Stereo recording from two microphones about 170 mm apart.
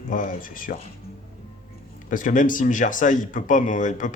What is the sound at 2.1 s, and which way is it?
Speech, 50° left (ahead or behind).